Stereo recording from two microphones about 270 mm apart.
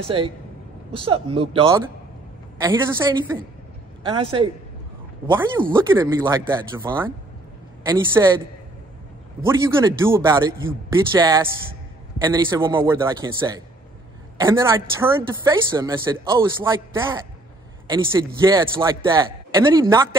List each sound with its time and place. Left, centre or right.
0.0 s speech: centre
9.4 s speech: centre
14.4 s speech: centre